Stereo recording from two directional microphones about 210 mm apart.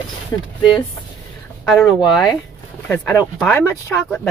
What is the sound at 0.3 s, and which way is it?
Speech, 15° left (ahead or behind).